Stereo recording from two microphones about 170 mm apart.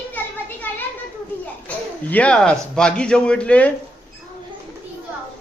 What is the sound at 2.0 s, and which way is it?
Speech, 10° left (ahead or behind).